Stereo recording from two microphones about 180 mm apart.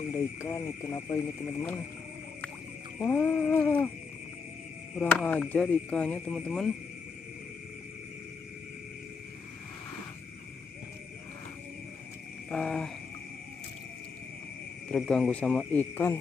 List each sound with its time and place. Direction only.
0.1 s speech: 15° left (ahead or behind)
3.0 s speech: 10° left (ahead or behind)
4.9 s speech: 5° left (ahead or behind)
12.4 s speech: 5° left (ahead or behind)
14.9 s speech: 5° left (ahead or behind)